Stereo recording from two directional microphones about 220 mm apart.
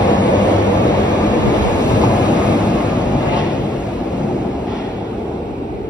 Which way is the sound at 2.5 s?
20° right (ahead or behind).